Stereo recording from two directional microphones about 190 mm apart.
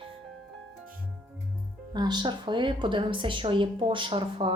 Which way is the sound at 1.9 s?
20° right (ahead or behind).